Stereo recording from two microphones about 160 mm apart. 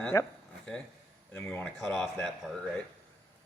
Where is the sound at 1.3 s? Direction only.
10° left (ahead or behind).